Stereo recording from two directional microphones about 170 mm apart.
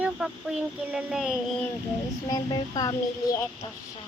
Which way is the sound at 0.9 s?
5° right (ahead or behind).